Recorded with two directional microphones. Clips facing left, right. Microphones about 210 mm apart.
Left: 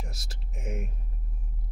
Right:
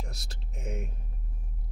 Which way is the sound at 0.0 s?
5° left (ahead or behind).